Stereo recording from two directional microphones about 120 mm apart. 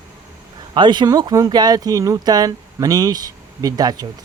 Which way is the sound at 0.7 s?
40° right (ahead or behind).